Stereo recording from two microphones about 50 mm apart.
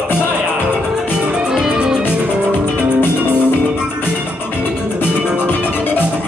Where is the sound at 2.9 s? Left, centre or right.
Left.